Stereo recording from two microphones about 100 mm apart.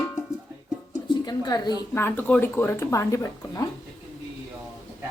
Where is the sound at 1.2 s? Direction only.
40° left (ahead or behind).